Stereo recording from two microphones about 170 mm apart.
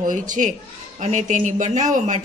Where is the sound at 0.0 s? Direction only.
50° right (ahead or behind).